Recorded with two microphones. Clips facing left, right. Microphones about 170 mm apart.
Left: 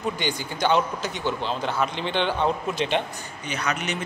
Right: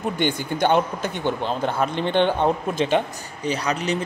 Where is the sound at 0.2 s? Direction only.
55° right (ahead or behind).